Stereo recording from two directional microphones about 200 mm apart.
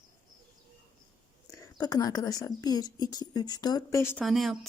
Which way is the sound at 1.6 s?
20° left (ahead or behind).